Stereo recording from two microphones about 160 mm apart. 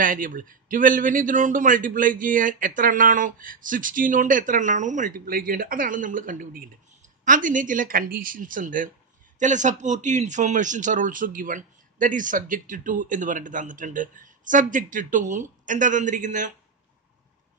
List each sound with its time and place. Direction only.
0.0 s a man's voice: 55° right (ahead or behind)